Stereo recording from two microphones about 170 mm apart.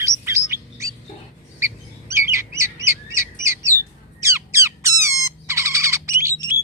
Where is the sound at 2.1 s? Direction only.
15° right (ahead or behind).